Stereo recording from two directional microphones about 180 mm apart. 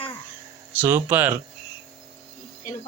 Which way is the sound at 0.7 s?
10° right (ahead or behind).